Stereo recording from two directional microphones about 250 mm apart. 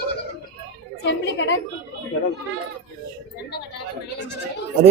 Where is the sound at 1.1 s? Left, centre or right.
Left.